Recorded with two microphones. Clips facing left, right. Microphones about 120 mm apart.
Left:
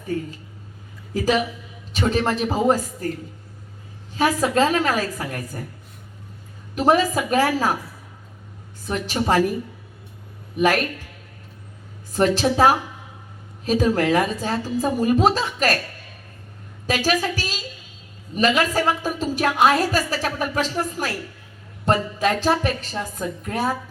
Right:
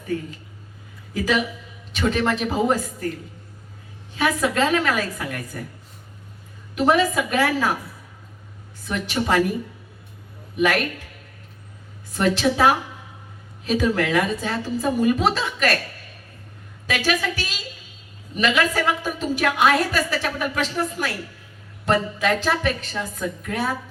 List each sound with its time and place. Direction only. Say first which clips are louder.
1.1 s a woman's voice: left 2 dB; 35° left (ahead or behind)
4.1 s a woman's voice: left 2 dB; 35° left (ahead or behind)
6.7 s a woman's voice: left 1 dB; 40° left (ahead or behind)
8.9 s a woman's voice: left 1 dB; 35° left (ahead or behind)
12.1 s a woman's voice: left 2 dB; 35° left (ahead or behind)
16.8 s a woman's voice: left 2 dB; 35° left (ahead or behind)